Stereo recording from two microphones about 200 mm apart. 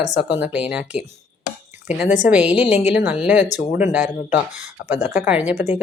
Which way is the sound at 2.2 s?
5° right (ahead or behind).